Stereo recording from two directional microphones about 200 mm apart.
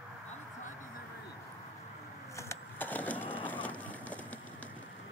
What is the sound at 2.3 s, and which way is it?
Wood, 10° left (ahead or behind).